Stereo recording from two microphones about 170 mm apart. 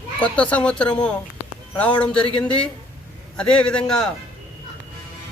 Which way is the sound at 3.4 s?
5° left (ahead or behind).